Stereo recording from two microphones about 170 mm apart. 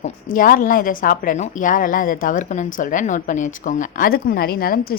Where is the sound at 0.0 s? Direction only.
55° left (ahead or behind).